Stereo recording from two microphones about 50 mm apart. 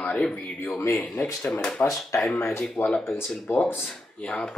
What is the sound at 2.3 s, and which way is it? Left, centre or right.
Speech, left.